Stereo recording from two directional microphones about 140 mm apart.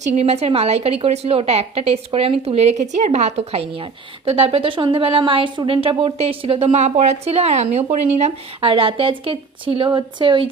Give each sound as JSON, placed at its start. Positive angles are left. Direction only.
{"t": 0.1, "sound": "a woman's voice", "side_deg": -50}